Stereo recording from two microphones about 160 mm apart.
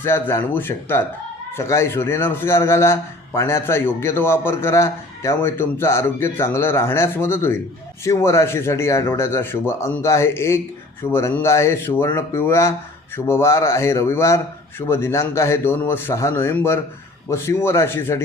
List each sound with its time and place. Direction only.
0.0 s a man's voice: 15° left (ahead or behind)